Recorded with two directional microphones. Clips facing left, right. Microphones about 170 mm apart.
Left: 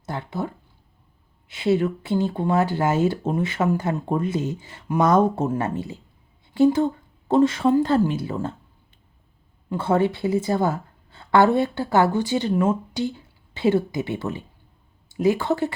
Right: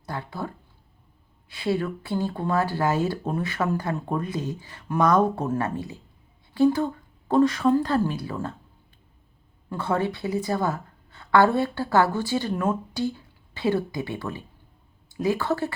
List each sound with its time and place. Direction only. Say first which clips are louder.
0.0 s speech: left 4 dB; 25° left (ahead or behind)
9.7 s speech: left 5 dB; 25° left (ahead or behind)